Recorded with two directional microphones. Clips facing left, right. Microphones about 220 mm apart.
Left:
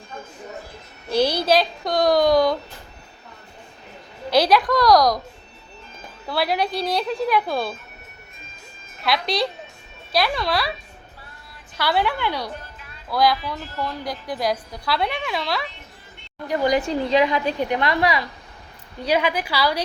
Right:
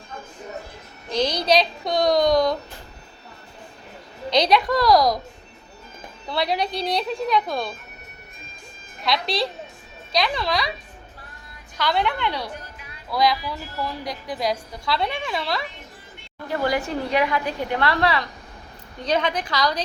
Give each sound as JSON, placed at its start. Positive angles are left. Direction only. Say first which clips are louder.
{"t": 1.1, "sound": "a woman's voice", "louder": "left 2 dB", "side_deg": 10}
{"t": 4.3, "sound": "a woman's voice", "louder": "left 2 dB", "side_deg": 5}
{"t": 6.2, "sound": "a woman's voice", "louder": "left 1 dB", "side_deg": 5}
{"t": 9.0, "sound": "a woman's voice", "louder": "left 1 dB", "side_deg": 0}
{"t": 11.8, "sound": "a woman's voice", "louder": "left 1 dB", "side_deg": 5}
{"t": 16.5, "sound": "a woman's voice", "louder": "left 3 dB", "side_deg": 20}